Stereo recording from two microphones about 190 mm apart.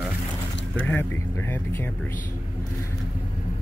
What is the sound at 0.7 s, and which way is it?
Speech, 10° left (ahead or behind).